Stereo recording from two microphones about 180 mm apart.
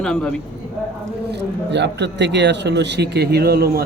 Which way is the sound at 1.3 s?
70° right (ahead or behind).